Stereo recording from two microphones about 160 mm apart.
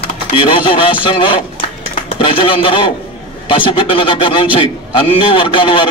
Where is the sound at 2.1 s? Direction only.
35° left (ahead or behind).